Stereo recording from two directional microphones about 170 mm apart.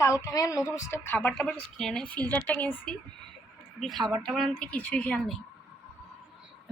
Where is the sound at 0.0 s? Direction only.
20° left (ahead or behind); by 5.4 s 5° left (ahead or behind).